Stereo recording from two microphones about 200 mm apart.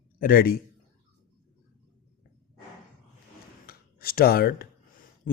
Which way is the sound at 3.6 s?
50° left (ahead or behind).